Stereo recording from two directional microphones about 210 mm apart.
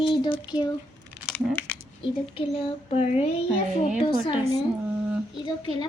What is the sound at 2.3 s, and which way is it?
Speech, 25° left (ahead or behind).